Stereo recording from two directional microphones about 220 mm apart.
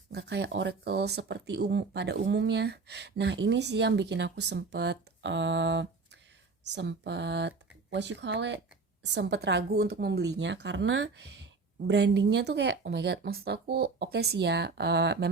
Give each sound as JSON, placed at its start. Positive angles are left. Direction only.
{"t": 0.1, "sound": "speech", "side_deg": -50}